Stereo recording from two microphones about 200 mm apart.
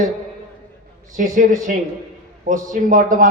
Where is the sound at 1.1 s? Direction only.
40° right (ahead or behind).